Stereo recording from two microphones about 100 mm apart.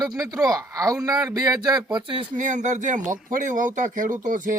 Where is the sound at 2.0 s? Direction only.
55° right (ahead or behind).